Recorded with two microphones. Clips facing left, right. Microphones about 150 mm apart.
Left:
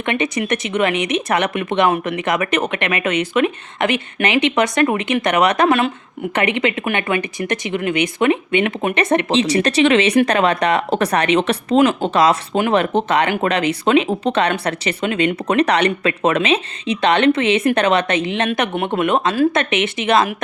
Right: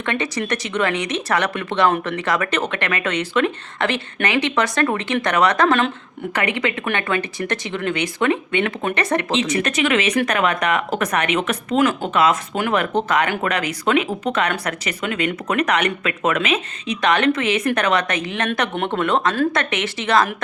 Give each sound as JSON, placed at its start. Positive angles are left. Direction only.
{"t": 0.0, "sound": "speech", "side_deg": 20}
{"t": 5.6, "sound": "speech", "side_deg": 5}
{"t": 6.3, "sound": "speech", "side_deg": 20}
{"t": 12.5, "sound": "speech", "side_deg": 25}